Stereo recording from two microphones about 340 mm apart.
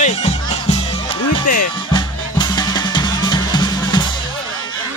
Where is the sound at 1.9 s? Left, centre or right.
Centre.